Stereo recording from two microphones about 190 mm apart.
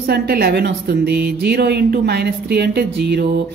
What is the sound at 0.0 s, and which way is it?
A woman's voice, 55° right (ahead or behind).